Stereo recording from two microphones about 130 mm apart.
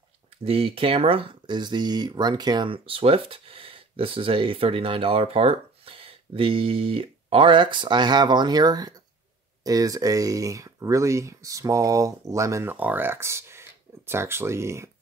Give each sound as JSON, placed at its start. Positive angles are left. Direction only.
{"t": 0.5, "sound": "speech", "side_deg": -45}